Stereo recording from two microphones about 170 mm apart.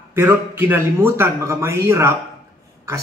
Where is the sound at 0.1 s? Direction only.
15° right (ahead or behind).